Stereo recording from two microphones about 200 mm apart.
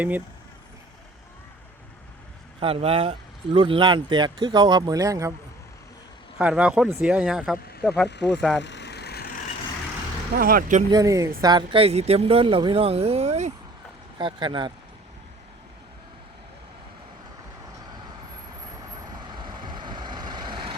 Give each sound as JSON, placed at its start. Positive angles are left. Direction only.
{"t": 2.6, "sound": "speech", "side_deg": -30}
{"t": 6.4, "sound": "speech", "side_deg": -5}
{"t": 8.1, "sound": "speech", "side_deg": 60}
{"t": 8.4, "sound": "speech", "side_deg": 0}
{"t": 8.6, "sound": "vehicle", "side_deg": 60}
{"t": 10.3, "sound": "speech", "side_deg": -45}
{"t": 10.9, "sound": "speech", "side_deg": -15}
{"t": 19.3, "sound": "vehicle", "side_deg": -20}